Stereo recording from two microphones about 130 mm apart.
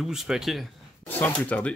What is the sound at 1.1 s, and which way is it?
Speech, 15° left (ahead or behind).